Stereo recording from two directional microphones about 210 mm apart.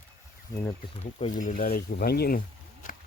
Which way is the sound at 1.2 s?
35° left (ahead or behind).